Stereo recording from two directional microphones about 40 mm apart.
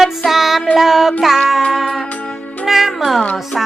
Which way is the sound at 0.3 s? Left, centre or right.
Centre.